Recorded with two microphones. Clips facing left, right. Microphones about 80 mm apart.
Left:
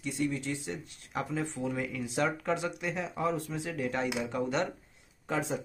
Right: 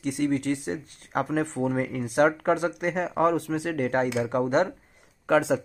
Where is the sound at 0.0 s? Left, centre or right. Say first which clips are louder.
Right 7 dB; right.